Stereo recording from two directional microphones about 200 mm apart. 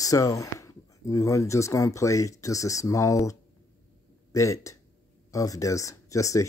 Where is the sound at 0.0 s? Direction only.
15° left (ahead or behind).